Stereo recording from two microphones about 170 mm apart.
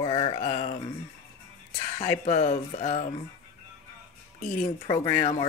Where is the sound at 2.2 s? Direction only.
45° left (ahead or behind).